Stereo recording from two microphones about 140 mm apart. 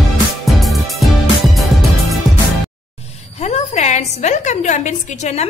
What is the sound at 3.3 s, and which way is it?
A woman's voice, 50° left (ahead or behind).